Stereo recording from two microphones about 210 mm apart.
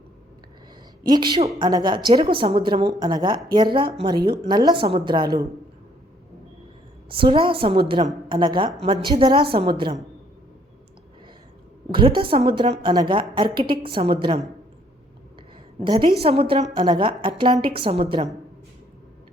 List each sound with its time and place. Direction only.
1.0 s a woman's voice: 20° right (ahead or behind)
7.1 s a woman's voice: 25° right (ahead or behind)
11.9 s a woman's voice: 25° right (ahead or behind)
15.8 s a woman's voice: 25° right (ahead or behind)